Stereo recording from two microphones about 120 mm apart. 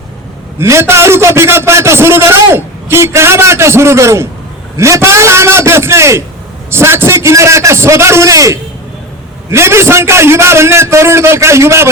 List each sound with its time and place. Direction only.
0.6 s a man's voice: 20° right (ahead or behind)